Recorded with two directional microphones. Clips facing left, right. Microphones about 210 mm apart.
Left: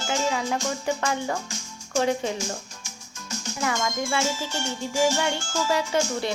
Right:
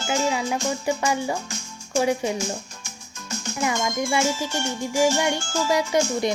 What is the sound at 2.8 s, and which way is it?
Music, 55° right (ahead or behind).